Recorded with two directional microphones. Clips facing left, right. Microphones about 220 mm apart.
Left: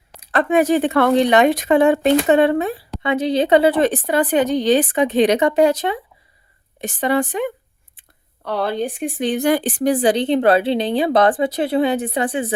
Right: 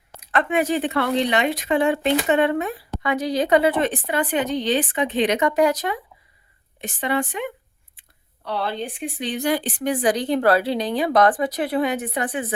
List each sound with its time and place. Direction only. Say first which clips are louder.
0.1 s speech: left 5 dB; 35° left (ahead or behind)
2.2 s speech: left 5 dB; 35° left (ahead or behind)
6.8 s speech: left 5 dB; 40° left (ahead or behind)